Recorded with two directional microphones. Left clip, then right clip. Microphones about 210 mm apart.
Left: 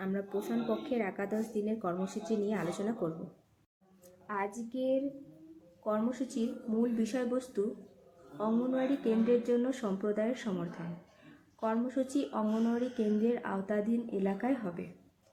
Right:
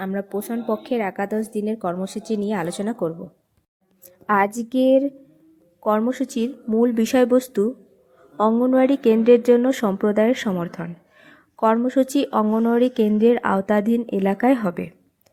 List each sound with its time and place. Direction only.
0.0 s speech: 50° right (ahead or behind)
4.3 s speech: 45° right (ahead or behind)